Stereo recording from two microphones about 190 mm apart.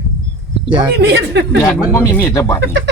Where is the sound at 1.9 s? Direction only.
15° left (ahead or behind).